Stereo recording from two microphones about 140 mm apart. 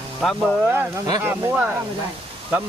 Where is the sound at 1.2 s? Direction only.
10° right (ahead or behind).